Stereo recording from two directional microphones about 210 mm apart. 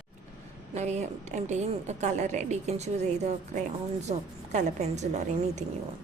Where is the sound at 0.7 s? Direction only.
30° right (ahead or behind).